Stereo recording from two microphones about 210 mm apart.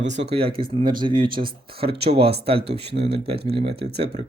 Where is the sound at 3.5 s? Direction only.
25° right (ahead or behind).